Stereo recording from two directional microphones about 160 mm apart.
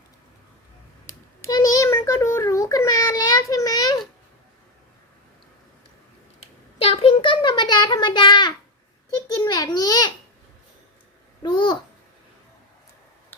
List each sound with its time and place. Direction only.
1.0 s a sound: 20° left (ahead or behind)
6.7 s child singing: 35° left (ahead or behind)
9.3 s babbling: 20° left (ahead or behind)
11.4 s babbling: 30° left (ahead or behind)